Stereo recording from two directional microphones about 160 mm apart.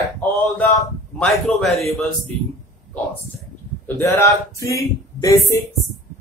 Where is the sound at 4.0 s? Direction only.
20° left (ahead or behind).